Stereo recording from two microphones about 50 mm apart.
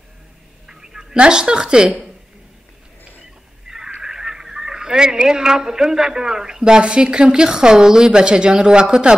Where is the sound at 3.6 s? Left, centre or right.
Centre.